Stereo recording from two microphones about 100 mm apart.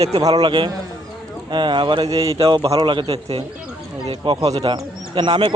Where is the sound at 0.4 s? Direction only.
50° right (ahead or behind).